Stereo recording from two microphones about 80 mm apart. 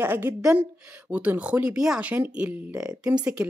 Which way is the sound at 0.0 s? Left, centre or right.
Right.